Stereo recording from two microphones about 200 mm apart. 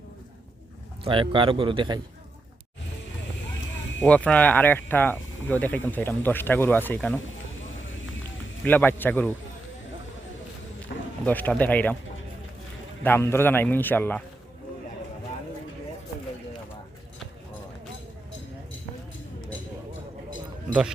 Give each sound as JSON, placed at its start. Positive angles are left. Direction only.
{"t": 1.0, "sound": "speech", "side_deg": -25}
{"t": 4.0, "sound": "speech", "side_deg": 5}
{"t": 8.6, "sound": "speech", "side_deg": 10}
{"t": 10.9, "sound": "a sound", "side_deg": 50}
{"t": 11.3, "sound": "speech", "side_deg": 10}
{"t": 13.0, "sound": "speech", "side_deg": 10}